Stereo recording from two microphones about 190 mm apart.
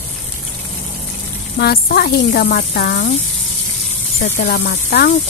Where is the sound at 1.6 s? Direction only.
55° left (ahead or behind).